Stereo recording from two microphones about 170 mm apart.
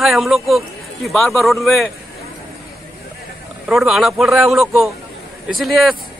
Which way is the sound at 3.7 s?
Centre (ahead or behind).